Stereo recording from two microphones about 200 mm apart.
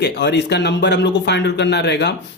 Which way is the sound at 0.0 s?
60° left (ahead or behind).